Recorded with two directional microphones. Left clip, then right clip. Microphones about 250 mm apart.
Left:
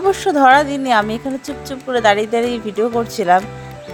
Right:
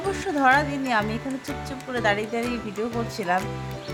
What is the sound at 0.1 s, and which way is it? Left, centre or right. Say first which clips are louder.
Speech: left 9 dB; left.